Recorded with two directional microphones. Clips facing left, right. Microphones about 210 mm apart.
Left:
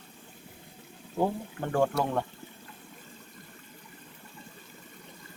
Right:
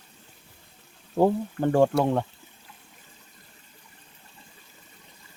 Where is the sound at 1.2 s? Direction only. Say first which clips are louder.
Right 7 dB; 50° right (ahead or behind).